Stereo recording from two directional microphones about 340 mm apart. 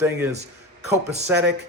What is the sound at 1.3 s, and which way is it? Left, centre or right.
Speech, centre.